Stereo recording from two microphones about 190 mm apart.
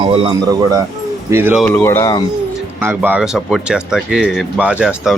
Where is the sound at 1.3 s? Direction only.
10° right (ahead or behind).